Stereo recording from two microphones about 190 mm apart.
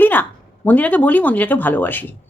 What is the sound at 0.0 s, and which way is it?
A woman's voice, 10° left (ahead or behind).